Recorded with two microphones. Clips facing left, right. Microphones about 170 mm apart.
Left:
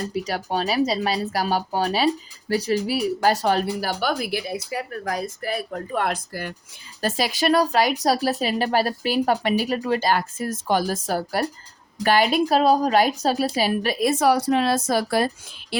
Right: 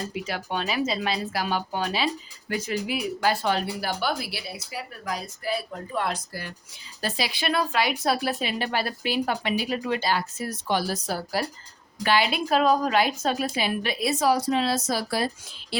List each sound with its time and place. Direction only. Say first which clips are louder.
0.1 s speech: left 5 dB; 40° left (ahead or behind)